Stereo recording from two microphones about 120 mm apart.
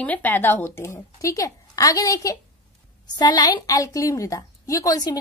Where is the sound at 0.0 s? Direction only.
15° left (ahead or behind).